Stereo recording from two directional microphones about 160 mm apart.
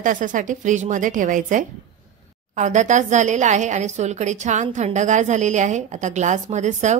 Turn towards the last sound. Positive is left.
turn(degrees=-45)  # may be behind; listen again after turning